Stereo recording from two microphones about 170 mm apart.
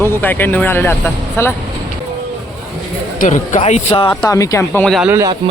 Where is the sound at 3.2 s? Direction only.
50° left (ahead or behind); by 4.2 s 30° left (ahead or behind).